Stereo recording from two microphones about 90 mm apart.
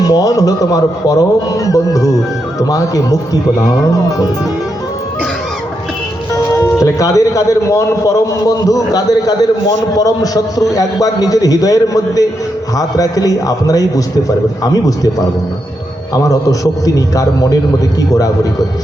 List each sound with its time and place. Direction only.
0.0 s a man's voice: 45° left (ahead or behind)
6.7 s a man's voice: 40° left (ahead or behind)
16.1 s a man's voice: 40° left (ahead or behind)